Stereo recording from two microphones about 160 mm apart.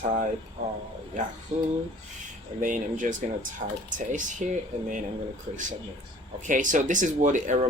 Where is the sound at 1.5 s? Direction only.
45° right (ahead or behind).